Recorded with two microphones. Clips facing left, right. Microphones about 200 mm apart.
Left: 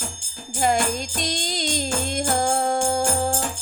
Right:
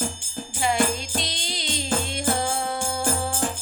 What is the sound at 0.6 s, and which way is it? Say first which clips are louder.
Music: left 2 dB; 45° left (ahead or behind).